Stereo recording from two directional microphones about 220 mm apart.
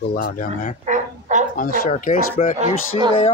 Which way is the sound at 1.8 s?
35° left (ahead or behind).